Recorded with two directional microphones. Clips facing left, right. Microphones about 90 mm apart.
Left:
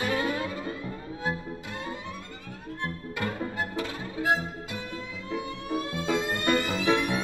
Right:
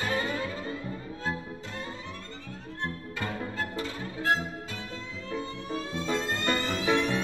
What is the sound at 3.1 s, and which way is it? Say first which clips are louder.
Music: left 3 dB; 15° left (ahead or behind).